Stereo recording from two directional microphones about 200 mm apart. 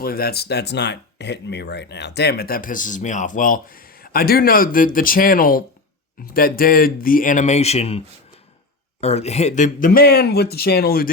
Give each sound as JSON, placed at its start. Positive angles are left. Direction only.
{"t": 0.0, "sound": "speech", "side_deg": 50}